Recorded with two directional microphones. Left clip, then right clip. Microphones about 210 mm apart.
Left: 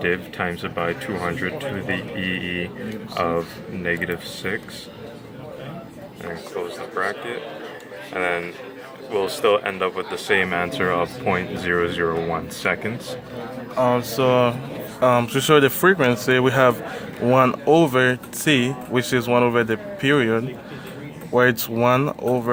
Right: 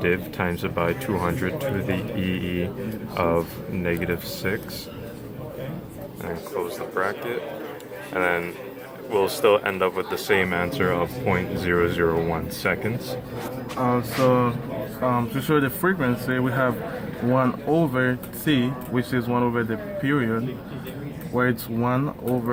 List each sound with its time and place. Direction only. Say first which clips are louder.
0.0 s speech: left 1 dB; centre (ahead or behind)
6.9 s speech: left 1 dB; centre (ahead or behind)
13.8 s speech: left 2 dB; 60° left (ahead or behind)